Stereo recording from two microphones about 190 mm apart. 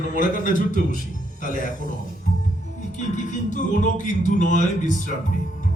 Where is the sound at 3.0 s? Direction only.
40° left (ahead or behind).